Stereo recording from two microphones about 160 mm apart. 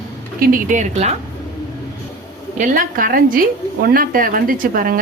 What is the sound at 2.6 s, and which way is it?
A woman's voice, 60° right (ahead or behind).